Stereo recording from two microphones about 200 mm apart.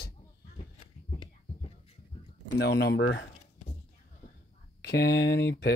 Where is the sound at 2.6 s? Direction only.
55° left (ahead or behind).